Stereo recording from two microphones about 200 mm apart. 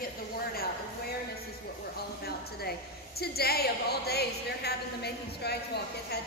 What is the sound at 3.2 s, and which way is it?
A woman's voice, 50° left (ahead or behind).